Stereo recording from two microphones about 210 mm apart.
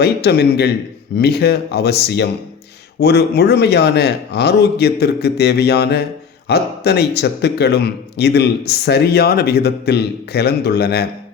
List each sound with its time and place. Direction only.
0.0 s a man's voice: 50° left (ahead or behind)